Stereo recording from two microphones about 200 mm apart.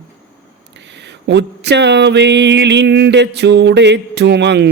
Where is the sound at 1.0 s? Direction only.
60° right (ahead or behind).